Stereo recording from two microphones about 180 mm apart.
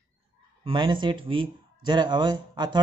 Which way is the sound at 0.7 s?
25° right (ahead or behind).